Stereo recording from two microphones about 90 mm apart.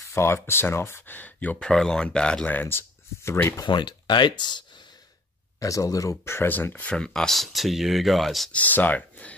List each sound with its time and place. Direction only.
0.1 s speech: 30° left (ahead or behind); by 2.5 s 10° left (ahead or behind)
2.5 s speech: 20° left (ahead or behind)
3.6 s speech: 55° left (ahead or behind)
5.6 s speech: 40° left (ahead or behind); by 8.5 s centre (ahead or behind)
8.5 s speech: 15° left (ahead or behind)